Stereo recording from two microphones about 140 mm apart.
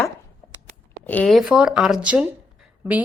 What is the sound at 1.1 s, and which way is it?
Speech, 10° left (ahead or behind).